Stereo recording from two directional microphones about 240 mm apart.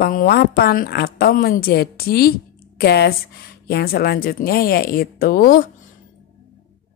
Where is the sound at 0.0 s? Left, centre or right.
Left.